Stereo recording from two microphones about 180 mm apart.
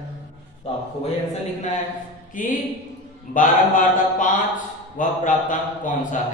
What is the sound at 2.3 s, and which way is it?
A man's voice, 45° left (ahead or behind).